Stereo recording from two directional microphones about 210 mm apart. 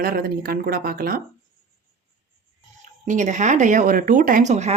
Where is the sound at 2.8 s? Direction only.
35° right (ahead or behind).